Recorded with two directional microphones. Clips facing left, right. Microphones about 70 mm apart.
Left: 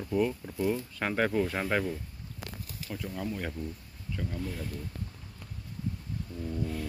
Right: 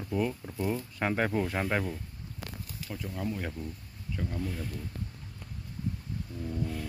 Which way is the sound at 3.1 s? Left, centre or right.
Centre.